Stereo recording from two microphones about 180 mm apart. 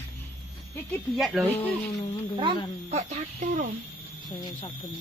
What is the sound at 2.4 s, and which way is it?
Speech, 35° right (ahead or behind).